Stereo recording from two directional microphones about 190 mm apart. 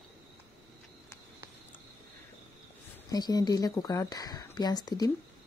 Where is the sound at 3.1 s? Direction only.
20° left (ahead or behind).